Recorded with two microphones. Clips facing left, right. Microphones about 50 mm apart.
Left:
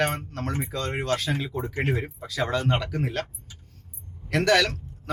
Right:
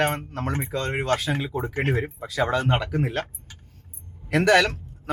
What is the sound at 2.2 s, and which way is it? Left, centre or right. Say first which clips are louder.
Speech: right 2 dB; centre.